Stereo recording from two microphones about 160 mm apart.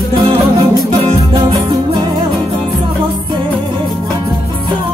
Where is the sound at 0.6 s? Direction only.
30° right (ahead or behind).